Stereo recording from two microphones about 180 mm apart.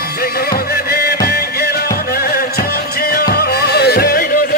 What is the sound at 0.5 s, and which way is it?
Music, 55° left (ahead or behind).